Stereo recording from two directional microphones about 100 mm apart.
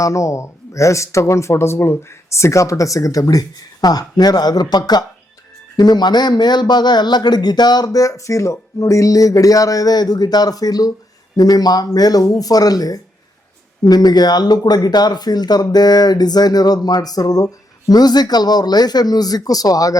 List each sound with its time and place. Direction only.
0.0 s speech: 30° left (ahead or behind)